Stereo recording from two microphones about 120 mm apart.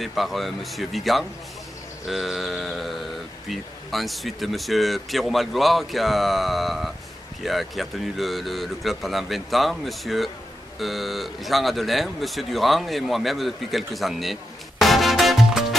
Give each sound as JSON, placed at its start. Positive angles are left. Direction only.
{"t": 0.0, "sound": "speech", "side_deg": 0}